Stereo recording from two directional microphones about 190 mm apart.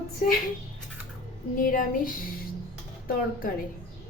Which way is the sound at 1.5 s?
45° left (ahead or behind).